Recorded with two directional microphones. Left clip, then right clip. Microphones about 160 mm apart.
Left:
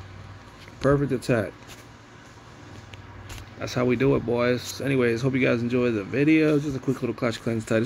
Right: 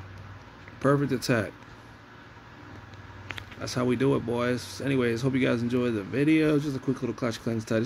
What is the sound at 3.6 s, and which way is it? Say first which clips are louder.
Speech: left 4 dB; 5° left (ahead or behind).